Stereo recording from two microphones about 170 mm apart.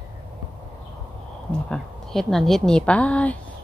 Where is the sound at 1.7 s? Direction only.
Centre (ahead or behind).